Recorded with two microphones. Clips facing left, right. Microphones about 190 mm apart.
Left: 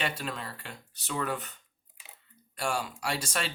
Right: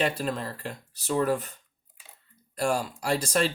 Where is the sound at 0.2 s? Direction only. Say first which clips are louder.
Right 7 dB; 40° right (ahead or behind).